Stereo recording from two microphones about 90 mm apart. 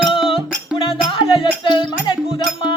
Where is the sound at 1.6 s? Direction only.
60° left (ahead or behind).